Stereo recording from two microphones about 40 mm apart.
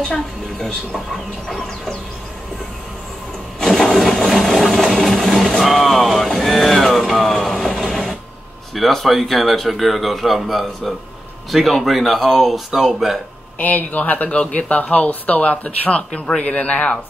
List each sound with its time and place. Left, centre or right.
0.1 s a woman's voice: centre
1.5 s speech: centre
3.5 s a sound: centre
5.6 s vehicle: centre
8.7 s speech: centre
13.6 s speech: left
16.1 s a man's voice: left
16.5 s speech: left